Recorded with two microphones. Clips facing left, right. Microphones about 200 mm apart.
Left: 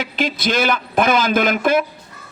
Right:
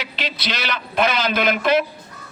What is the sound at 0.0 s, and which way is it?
A man's voice, 50° left (ahead or behind).